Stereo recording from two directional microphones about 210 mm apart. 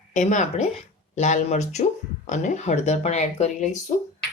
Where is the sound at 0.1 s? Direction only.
35° left (ahead or behind).